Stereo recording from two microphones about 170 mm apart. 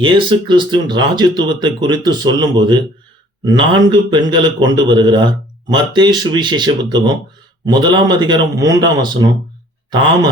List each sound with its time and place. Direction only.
0.0 s a man's voice: 30° right (ahead or behind)